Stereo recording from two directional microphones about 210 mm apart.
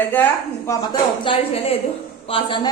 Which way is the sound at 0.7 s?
20° left (ahead or behind).